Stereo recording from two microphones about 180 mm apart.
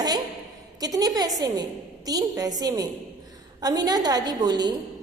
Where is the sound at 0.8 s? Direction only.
20° right (ahead or behind).